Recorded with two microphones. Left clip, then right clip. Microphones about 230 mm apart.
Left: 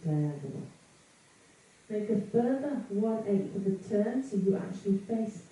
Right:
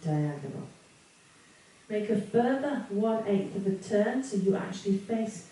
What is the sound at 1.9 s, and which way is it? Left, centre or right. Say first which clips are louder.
A woman's voice: right 2 dB; centre.